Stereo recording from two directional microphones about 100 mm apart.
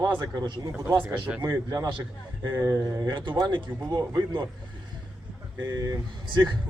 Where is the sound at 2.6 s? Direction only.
30° right (ahead or behind).